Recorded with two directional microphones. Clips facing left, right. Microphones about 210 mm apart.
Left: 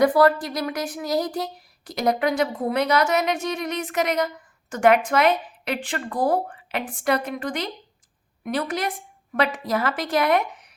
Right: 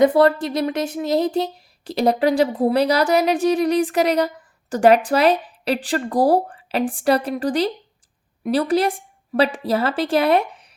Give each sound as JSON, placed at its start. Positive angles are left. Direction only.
{"t": 0.0, "sound": "a woman's voice", "side_deg": -25}